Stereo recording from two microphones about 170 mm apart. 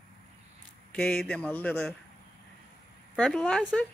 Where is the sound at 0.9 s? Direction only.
5° left (ahead or behind).